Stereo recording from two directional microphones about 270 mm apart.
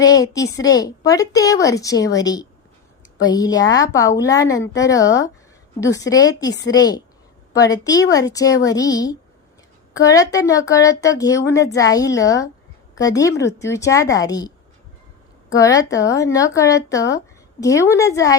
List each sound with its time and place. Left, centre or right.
0.0 s speech: centre
15.5 s speech: centre